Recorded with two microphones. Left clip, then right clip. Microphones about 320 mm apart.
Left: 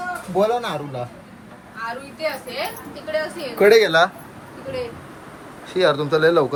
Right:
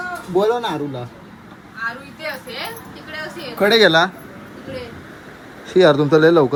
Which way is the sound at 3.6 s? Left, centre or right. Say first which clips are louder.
Even; right.